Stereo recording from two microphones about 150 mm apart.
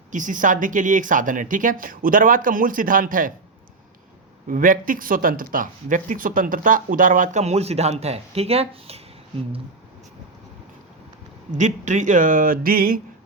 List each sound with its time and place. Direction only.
0.1 s speech: 60° right (ahead or behind)
4.4 s speech: 65° right (ahead or behind); by 9.0 s 40° right (ahead or behind)
11.5 s speech: 55° right (ahead or behind); by 13.0 s 75° right (ahead or behind)